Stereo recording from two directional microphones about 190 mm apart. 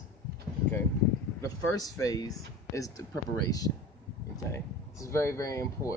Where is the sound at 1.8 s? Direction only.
20° left (ahead or behind).